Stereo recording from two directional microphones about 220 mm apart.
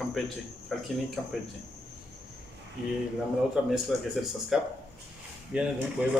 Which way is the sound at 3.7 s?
Centre (ahead or behind).